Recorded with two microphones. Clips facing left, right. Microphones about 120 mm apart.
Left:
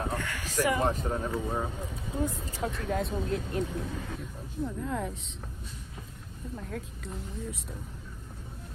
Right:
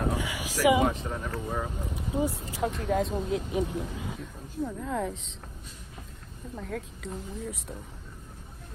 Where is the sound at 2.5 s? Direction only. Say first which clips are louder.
Right 4 dB; centre (ahead or behind).